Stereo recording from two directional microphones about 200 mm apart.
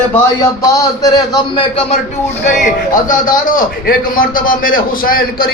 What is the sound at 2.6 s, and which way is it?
A man's voice, 40° left (ahead or behind).